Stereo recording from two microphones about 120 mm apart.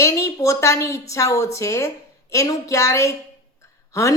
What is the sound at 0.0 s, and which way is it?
A woman's voice, 25° left (ahead or behind).